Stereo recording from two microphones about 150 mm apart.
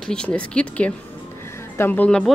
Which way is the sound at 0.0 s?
5° left (ahead or behind).